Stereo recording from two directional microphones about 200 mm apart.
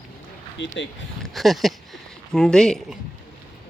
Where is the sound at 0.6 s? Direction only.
65° left (ahead or behind).